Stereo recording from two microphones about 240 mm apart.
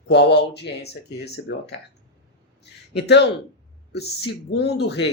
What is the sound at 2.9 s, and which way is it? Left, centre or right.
Speech, left.